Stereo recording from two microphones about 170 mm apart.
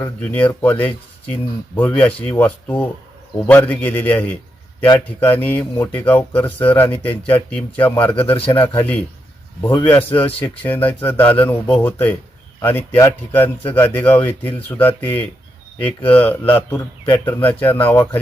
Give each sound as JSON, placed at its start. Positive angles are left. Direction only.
{"t": 0.0, "sound": "a man's voice", "side_deg": 10}
{"t": 8.4, "sound": "a man's voice", "side_deg": 35}
{"t": 8.6, "sound": "a man's voice", "side_deg": 10}